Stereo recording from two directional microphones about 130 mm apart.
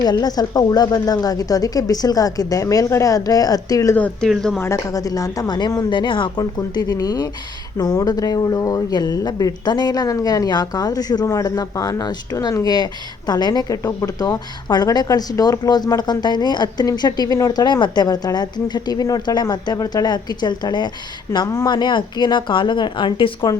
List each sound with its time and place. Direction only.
0.0 s a woman's voice: 30° left (ahead or behind)
3.9 s speech: 10° left (ahead or behind)
4.3 s speech: centre (ahead or behind)
4.6 s a woman's voice: 25° left (ahead or behind)